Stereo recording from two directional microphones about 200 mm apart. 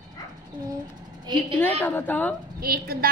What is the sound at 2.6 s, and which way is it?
Speech, 50° right (ahead or behind).